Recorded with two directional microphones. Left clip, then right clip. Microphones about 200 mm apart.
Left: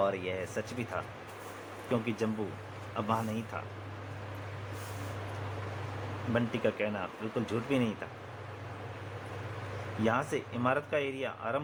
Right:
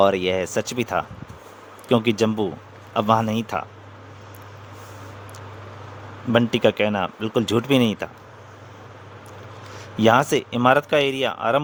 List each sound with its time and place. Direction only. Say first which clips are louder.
0.0 s speech: right 13 dB; 60° right (ahead or behind)
6.3 s speech: right 13 dB; 60° right (ahead or behind)
10.0 s speech: right 15 dB; 55° right (ahead or behind)